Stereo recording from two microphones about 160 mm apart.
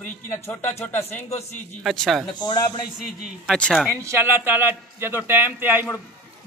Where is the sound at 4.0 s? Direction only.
15° right (ahead or behind).